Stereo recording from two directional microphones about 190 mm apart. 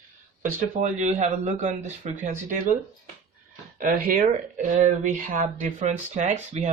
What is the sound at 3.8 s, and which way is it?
Speech, 45° right (ahead or behind).